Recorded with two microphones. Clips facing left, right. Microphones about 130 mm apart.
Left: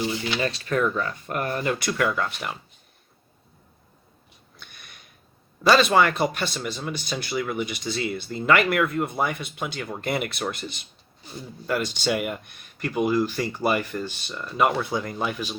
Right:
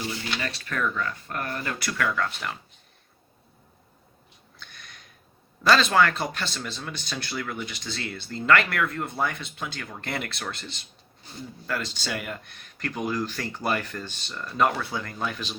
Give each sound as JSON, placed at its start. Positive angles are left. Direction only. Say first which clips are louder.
{"t": 0.3, "sound": "speech", "louder": "left 9 dB", "side_deg": 25}
{"t": 4.5, "sound": "sniff", "louder": "right 1 dB", "side_deg": 10}
{"t": 5.6, "sound": "speech", "louder": "left 2 dB", "side_deg": 10}